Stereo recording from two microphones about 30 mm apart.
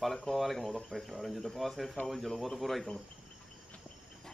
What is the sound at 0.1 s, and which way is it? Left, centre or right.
Speech, centre.